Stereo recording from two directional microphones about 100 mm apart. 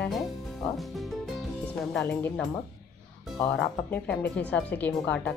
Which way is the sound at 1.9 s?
20° left (ahead or behind).